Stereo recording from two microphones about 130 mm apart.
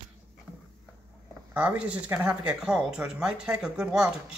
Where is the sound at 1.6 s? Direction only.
10° right (ahead or behind).